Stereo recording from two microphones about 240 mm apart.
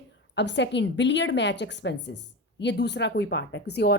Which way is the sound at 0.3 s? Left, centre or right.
Left.